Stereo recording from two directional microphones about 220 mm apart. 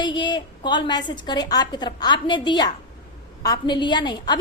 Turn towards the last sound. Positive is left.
turn(degrees=20)  # may be behind; listen again after turning